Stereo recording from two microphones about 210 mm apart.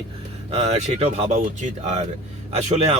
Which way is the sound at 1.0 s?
35° right (ahead or behind).